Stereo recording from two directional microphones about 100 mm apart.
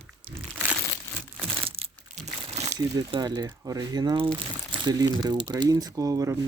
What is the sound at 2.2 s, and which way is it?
Crumpling, 90° right.